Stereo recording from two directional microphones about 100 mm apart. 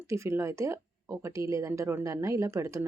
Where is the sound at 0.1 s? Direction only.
25° right (ahead or behind).